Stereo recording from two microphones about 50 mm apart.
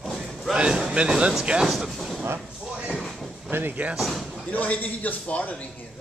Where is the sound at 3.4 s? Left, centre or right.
Right.